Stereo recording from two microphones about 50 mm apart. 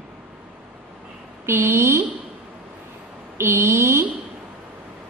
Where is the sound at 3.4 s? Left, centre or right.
Right.